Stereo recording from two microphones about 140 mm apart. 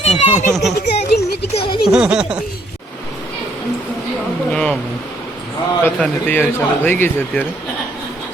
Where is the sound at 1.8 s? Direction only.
5° right (ahead or behind).